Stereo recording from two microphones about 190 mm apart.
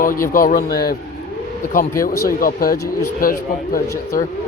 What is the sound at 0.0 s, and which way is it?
Speech, 45° left (ahead or behind).